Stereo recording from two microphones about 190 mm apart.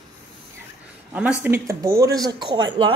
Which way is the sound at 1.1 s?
10° right (ahead or behind).